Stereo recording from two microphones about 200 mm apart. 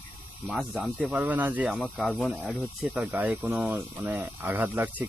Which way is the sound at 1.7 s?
Centre (ahead or behind).